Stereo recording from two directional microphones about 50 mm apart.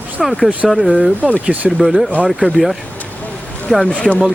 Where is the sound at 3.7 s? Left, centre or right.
Centre.